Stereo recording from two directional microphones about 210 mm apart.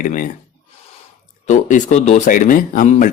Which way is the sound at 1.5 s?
35° left (ahead or behind).